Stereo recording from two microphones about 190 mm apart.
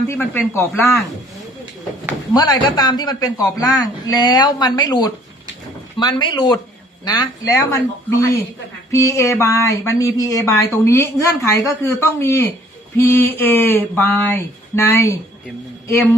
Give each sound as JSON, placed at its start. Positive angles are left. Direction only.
{"t": 0.1, "sound": "speech", "side_deg": 10}
{"t": 2.3, "sound": "a man's voice", "side_deg": 20}
{"t": 8.9, "sound": "speech", "side_deg": 15}